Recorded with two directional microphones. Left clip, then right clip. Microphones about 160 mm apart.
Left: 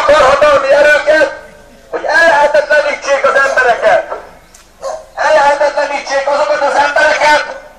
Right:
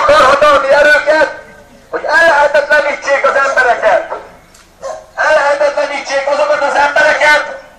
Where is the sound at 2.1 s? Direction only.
15° left (ahead or behind).